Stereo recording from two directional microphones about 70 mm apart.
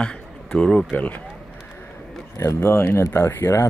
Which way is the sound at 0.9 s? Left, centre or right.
Left.